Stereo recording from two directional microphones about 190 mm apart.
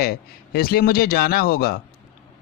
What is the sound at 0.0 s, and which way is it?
Speech, 55° left (ahead or behind).